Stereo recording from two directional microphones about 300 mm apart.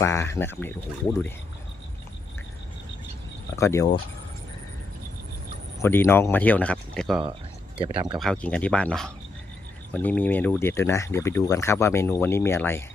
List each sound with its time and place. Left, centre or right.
0.0 s speech: centre
3.5 s speech: centre
5.8 s speech: centre
7.8 s speech: centre
8.2 s speech: centre